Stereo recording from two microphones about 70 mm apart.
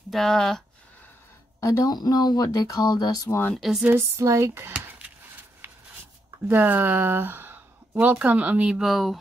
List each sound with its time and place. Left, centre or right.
0.1 s speech: centre
1.6 s speech: left
2.0 s a sound: left
3.5 s speech: centre
4.2 s speech: right
4.7 s dishes: centre
5.6 s a sound: right
6.5 s speech: right
8.7 s speech: centre